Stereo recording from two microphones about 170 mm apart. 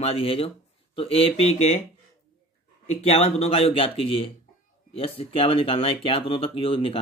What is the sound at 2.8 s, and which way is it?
Speech, 35° left (ahead or behind).